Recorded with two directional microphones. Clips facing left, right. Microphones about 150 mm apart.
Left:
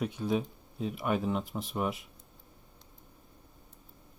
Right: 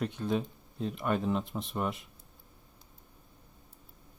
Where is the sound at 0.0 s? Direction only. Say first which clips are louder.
Left 1 dB; 5° left (ahead or behind).